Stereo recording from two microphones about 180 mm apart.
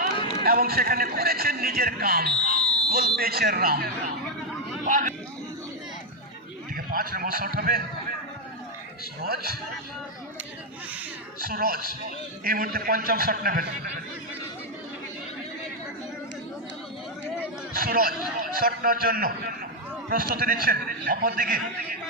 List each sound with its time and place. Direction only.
0.4 s a man's voice: 55° right (ahead or behind)
4.9 s a man's voice: 45° right (ahead or behind)
6.7 s a man's voice: 55° right (ahead or behind)
9.2 s a man's voice: 55° right (ahead or behind)
11.3 s a man's voice: 55° right (ahead or behind)
17.7 s a man's voice: 50° right (ahead or behind)